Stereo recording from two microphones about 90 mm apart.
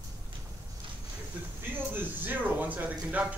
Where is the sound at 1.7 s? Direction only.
20° right (ahead or behind).